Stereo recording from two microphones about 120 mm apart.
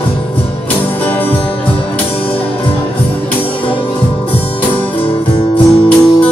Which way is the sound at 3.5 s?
45° left (ahead or behind).